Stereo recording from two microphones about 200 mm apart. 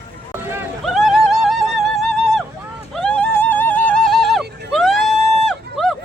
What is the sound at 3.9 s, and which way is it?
Music, 45° right (ahead or behind).